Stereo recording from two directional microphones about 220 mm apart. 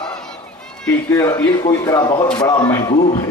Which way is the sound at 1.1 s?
15° left (ahead or behind).